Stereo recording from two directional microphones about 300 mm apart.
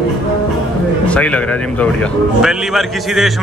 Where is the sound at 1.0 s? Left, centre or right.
Centre.